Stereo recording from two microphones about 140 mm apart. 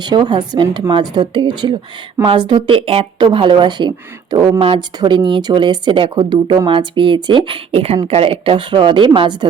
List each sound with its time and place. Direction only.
0.0 s speech: 30° right (ahead or behind)